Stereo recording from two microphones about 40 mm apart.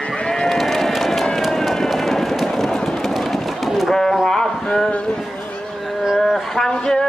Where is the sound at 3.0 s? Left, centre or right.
Centre.